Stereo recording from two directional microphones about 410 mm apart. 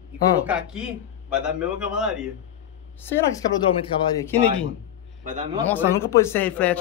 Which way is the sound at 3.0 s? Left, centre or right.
Centre.